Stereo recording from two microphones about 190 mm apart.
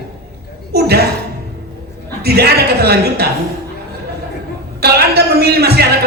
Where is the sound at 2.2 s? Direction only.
55° right (ahead or behind).